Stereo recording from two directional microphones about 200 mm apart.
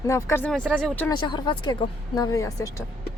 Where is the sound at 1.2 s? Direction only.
20° left (ahead or behind).